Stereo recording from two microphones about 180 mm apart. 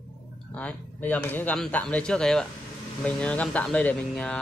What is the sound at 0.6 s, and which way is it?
A man's voice, 10° left (ahead or behind).